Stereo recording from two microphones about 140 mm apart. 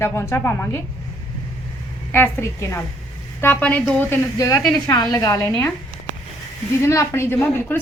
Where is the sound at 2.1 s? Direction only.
15° left (ahead or behind).